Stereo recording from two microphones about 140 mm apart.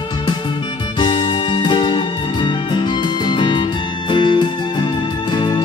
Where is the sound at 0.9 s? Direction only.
35° left (ahead or behind).